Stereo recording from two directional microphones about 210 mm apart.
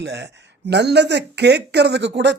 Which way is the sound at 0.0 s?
55° right (ahead or behind).